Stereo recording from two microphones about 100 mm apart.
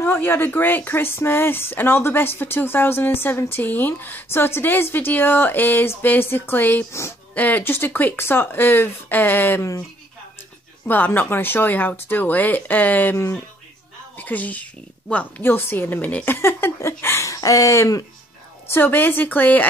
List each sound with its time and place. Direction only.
0.0 s speech: 20° left (ahead or behind)
10.9 s speech: 20° left (ahead or behind)
18.7 s speech: 20° left (ahead or behind)